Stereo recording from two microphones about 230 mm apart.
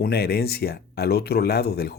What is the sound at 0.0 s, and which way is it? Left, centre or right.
Speech, left.